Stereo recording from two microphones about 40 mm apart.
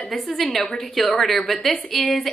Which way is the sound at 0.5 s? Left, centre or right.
Centre.